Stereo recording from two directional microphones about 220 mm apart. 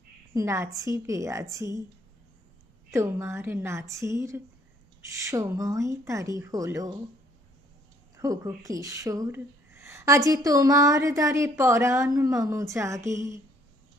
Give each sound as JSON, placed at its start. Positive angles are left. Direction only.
{"t": 0.3, "sound": "speech", "side_deg": -15}
{"t": 2.9, "sound": "speech", "side_deg": -10}
{"t": 8.1, "sound": "speech", "side_deg": -15}